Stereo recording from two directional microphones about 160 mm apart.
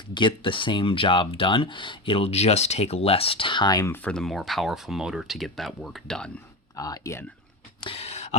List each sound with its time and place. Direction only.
0.1 s speech: 30° left (ahead or behind); by 6.3 s 5° left (ahead or behind)
6.7 s speech: 20° left (ahead or behind)
7.9 s a sound: 40° left (ahead or behind)